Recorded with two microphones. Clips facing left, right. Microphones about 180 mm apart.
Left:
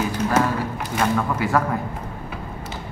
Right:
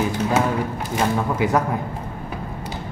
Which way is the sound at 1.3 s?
20° right (ahead or behind).